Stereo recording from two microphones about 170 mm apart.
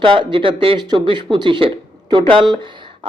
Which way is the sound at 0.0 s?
30° right (ahead or behind).